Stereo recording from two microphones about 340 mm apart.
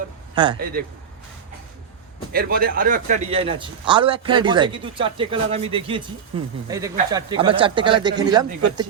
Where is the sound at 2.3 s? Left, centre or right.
Right.